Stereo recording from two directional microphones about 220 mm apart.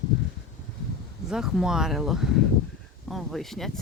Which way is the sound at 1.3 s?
Centre (ahead or behind).